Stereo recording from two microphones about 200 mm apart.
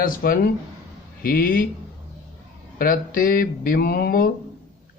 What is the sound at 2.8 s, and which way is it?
Speech, 45° left (ahead or behind).